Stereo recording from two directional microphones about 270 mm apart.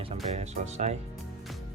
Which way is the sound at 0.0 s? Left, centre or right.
Right.